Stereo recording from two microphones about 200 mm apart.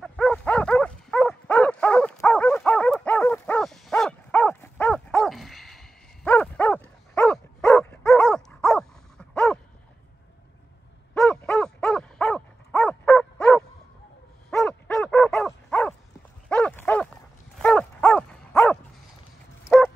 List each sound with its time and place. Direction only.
0.0 s dog: 5° left (ahead or behind)
11.1 s dog: 5° left (ahead or behind)